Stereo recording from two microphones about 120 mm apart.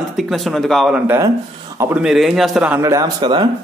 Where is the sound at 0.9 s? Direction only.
15° right (ahead or behind).